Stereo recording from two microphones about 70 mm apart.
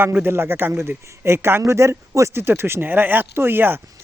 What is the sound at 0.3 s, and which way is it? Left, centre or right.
Speech, right.